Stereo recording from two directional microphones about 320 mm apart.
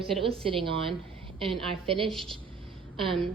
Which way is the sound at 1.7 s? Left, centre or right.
Centre.